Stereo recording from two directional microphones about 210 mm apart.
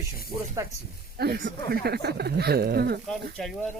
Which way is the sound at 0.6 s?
15° right (ahead or behind).